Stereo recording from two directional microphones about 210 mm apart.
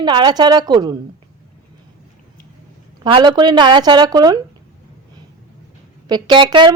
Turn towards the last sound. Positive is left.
turn(degrees=-20)  # may be behind; listen again after turning